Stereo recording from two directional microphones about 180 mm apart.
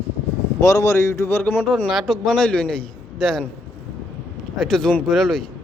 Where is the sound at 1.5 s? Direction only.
5° right (ahead or behind).